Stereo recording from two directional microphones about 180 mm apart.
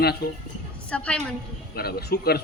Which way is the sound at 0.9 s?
5° left (ahead or behind).